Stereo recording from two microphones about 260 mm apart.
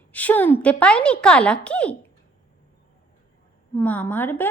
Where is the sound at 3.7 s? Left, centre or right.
Centre.